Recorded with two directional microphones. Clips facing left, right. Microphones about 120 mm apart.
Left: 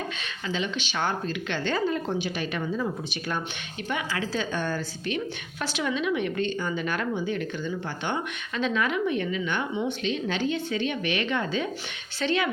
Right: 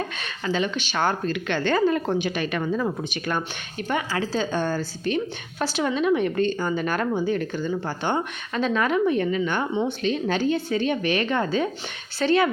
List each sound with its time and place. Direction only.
0.2 s a woman's voice: 50° right (ahead or behind)
3.8 s a woman's voice: 40° right (ahead or behind)